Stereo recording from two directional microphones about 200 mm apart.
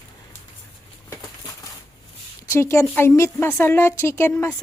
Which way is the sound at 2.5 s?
15° left (ahead or behind).